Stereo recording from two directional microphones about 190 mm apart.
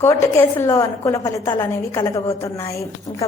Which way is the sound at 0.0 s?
15° left (ahead or behind).